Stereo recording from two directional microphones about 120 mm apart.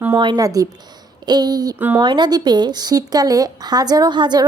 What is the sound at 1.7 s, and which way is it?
Speech, 15° right (ahead or behind).